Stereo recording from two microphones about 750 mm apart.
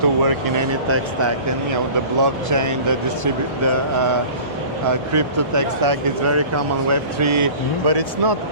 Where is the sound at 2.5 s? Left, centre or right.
Right.